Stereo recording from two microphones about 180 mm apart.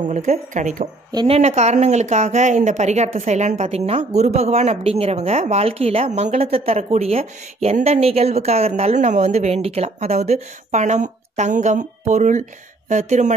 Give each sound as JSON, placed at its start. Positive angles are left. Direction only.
{"t": 0.1, "sound": "speech", "side_deg": -40}